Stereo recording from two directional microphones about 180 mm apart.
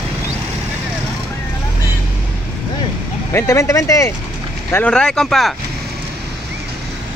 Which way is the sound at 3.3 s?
15° left (ahead or behind).